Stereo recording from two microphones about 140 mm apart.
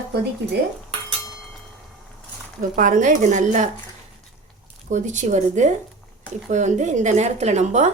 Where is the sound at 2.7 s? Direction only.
70° right (ahead or behind).